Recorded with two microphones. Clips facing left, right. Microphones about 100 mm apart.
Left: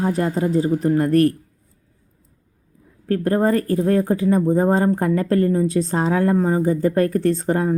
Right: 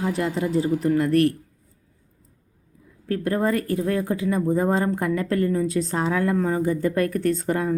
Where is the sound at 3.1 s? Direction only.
35° left (ahead or behind).